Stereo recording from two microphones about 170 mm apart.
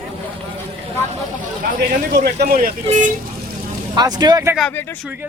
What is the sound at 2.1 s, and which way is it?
Speech, 75° right (ahead or behind).